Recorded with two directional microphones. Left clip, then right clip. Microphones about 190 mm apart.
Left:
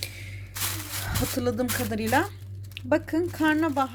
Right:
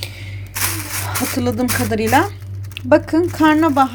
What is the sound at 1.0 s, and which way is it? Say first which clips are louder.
Speech: right 7 dB; 5° left (ahead or behind).